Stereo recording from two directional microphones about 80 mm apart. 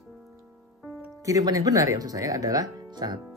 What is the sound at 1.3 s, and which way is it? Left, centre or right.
Speech, right.